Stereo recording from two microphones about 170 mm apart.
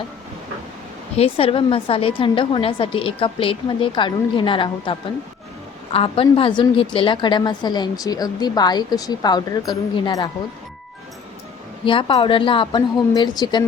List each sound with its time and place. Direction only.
1.1 s a woman's voice: 35° left (ahead or behind)
11.9 s speech: 30° left (ahead or behind)